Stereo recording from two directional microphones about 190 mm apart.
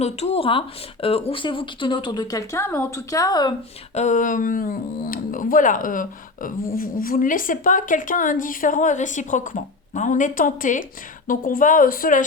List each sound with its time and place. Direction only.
0.0 s speech: 30° left (ahead or behind)
3.9 s speech: 40° left (ahead or behind)